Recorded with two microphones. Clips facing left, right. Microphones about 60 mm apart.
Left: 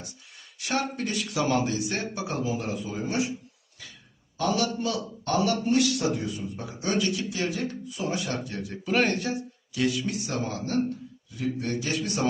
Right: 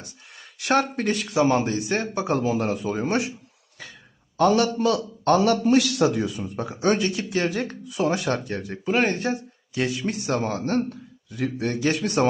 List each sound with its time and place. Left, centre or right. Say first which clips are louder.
0.6 s speech: right 7 dB; right
1.3 s a man's voice: right 5 dB; right
1.7 s speech: right 5 dB; right
2.4 s a man's voice: right 6 dB; right
4.4 s a man's voice: right 7 dB; right
7.0 s a man's voice: right 3 dB; right
7.3 s speech: right 5 dB; right
7.9 s a man's voice: right 11 dB; right
8.8 s speech: right 2 dB; centre
9.7 s a man's voice: right 1 dB; right
10.2 s a man's voice: right 5 dB; right